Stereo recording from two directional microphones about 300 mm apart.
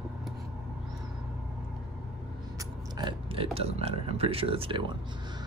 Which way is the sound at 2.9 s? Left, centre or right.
Centre.